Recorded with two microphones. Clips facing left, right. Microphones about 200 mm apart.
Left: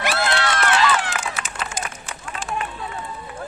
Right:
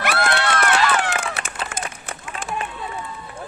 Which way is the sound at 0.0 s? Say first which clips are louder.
Right 1 dB; 60° right (ahead or behind).